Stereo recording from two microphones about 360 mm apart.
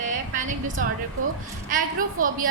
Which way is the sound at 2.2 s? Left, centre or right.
Right.